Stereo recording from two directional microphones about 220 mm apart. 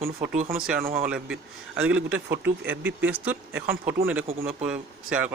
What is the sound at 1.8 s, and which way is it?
Speech, 5° right (ahead or behind).